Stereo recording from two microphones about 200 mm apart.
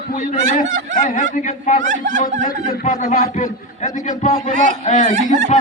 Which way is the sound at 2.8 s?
35° left (ahead or behind).